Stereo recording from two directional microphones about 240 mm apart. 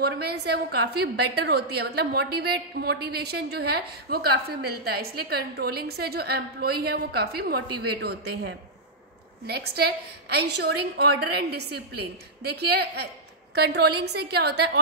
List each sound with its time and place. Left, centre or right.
0.0 s a woman's voice: right